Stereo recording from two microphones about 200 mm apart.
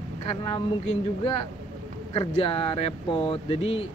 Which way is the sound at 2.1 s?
30° left (ahead or behind).